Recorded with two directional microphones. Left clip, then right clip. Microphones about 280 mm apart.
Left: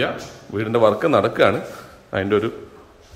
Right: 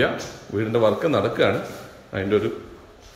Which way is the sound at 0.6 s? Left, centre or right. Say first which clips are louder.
Left 3 dB; centre.